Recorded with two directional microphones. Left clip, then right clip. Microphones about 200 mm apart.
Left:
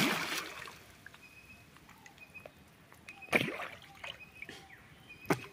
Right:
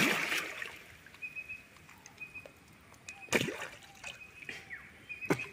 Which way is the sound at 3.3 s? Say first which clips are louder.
Left 1 dB; 40° right (ahead or behind).